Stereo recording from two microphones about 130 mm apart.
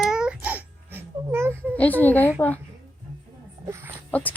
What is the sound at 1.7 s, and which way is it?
Speech, 10° left (ahead or behind).